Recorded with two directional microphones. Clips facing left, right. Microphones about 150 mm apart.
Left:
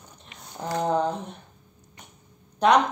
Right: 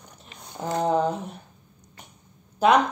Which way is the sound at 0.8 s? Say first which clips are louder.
Right 2 dB; 5° right (ahead or behind).